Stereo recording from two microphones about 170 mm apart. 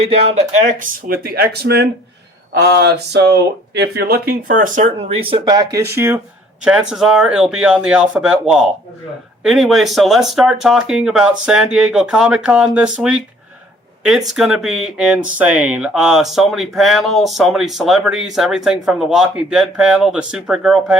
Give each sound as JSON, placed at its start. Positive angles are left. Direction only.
{"t": 0.7, "sound": "speech", "side_deg": -55}
{"t": 5.3, "sound": "speech", "side_deg": -25}
{"t": 6.7, "sound": "speech", "side_deg": -5}